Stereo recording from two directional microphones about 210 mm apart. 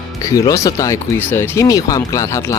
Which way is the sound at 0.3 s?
15° left (ahead or behind).